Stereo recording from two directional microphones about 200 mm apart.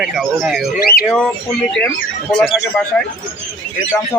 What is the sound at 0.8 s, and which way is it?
Speech, 50° left (ahead or behind).